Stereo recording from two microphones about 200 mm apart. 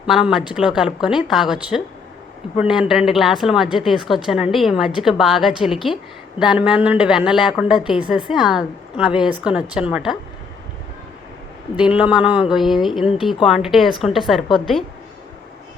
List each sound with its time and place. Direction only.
0.0 s a woman's voice: 5° right (ahead or behind)
2.6 s a woman's voice: 5° right (ahead or behind)
11.8 s a woman's voice: 5° right (ahead or behind)
14.4 s a woman's voice: 25° left (ahead or behind)